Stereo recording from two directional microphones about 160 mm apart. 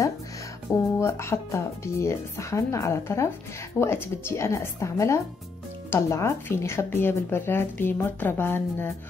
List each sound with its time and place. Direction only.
0.9 s speech: 15° left (ahead or behind)